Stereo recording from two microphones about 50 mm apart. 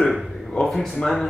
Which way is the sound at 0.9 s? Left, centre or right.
Centre.